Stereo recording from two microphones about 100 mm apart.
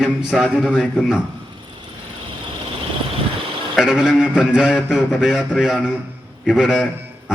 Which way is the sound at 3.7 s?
5° right (ahead or behind).